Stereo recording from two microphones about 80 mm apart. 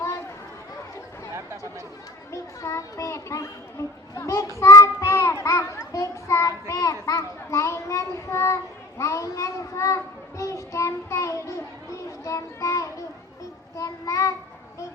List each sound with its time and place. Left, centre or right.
2.3 s a child's voice: left
4.5 s children playing: left
9.0 s child singing: left